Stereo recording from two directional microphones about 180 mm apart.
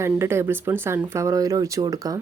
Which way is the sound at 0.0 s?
15° right (ahead or behind).